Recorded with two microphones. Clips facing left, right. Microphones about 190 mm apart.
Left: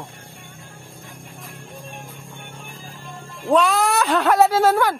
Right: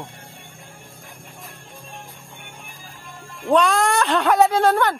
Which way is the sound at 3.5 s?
Centre (ahead or behind).